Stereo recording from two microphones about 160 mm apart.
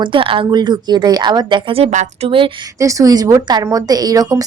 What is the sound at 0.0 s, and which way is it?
A woman's voice, 30° right (ahead or behind).